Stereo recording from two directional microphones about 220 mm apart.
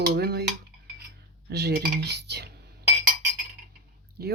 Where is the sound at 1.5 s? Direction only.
50° right (ahead or behind).